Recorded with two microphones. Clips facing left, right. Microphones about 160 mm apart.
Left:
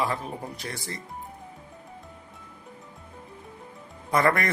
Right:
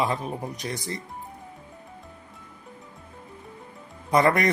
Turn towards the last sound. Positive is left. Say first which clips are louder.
# right 3 dB
turn(degrees=-20)  # may be behind; listen again after turning